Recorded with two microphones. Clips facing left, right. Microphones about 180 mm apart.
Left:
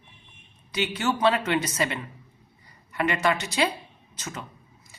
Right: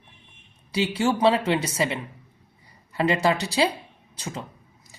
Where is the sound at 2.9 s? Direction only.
30° right (ahead or behind).